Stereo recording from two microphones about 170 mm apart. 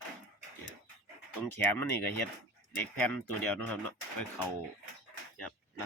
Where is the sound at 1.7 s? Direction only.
10° left (ahead or behind).